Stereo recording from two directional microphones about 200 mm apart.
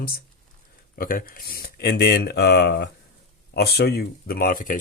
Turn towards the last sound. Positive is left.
turn(degrees=45)  # may be behind; listen again after turning